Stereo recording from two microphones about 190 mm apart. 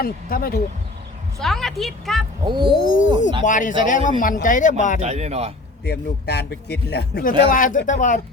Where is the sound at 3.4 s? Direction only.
40° left (ahead or behind).